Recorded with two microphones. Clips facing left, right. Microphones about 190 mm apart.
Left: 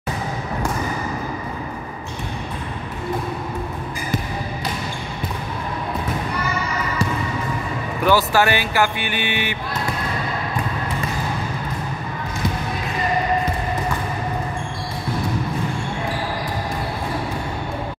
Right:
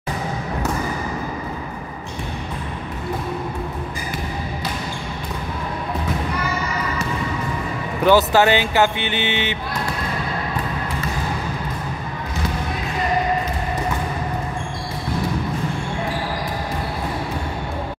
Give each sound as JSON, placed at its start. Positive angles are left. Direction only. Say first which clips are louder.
{"t": 8.0, "sound": "speech", "louder": "right 3 dB", "side_deg": -20}